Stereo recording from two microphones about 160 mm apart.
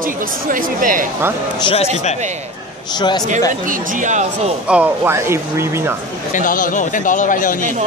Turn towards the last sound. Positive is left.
turn(degrees=55)  # may be behind; listen again after turning